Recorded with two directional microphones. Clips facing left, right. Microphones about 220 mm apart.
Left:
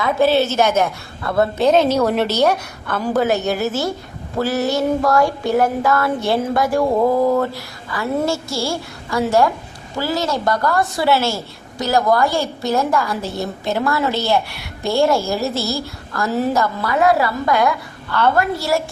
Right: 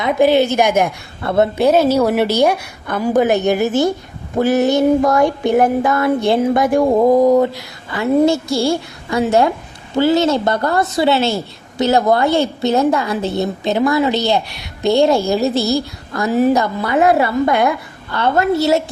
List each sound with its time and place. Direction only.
0.0 s a woman's voice: 15° right (ahead or behind)
1.5 s a woman's voice: 10° right (ahead or behind)